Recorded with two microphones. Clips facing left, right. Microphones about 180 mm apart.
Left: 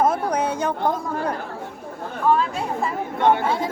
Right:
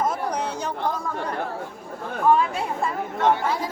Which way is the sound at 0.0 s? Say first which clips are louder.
Left 5 dB; 55° left (ahead or behind).